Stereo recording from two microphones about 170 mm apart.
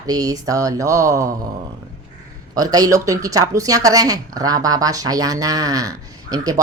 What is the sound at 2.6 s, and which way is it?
Speech, 20° right (ahead or behind).